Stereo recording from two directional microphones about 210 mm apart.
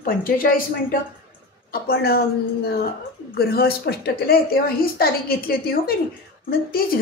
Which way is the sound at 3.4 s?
50° left (ahead or behind).